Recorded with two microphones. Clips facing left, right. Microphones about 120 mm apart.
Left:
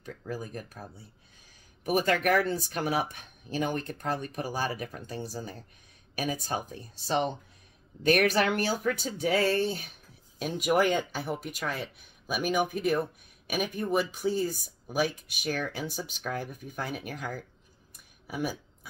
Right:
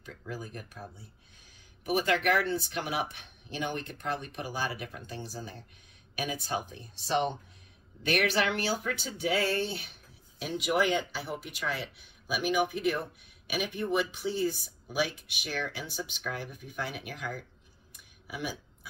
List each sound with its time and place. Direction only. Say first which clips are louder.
0.2 s speech: left 3 dB; 45° left (ahead or behind)
1.9 s speech: left 2 dB; 45° left (ahead or behind)
18.2 s a sound: left 4 dB; 40° left (ahead or behind)